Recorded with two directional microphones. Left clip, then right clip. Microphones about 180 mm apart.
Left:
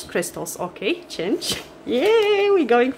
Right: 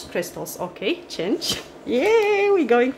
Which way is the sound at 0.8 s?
Centre (ahead or behind).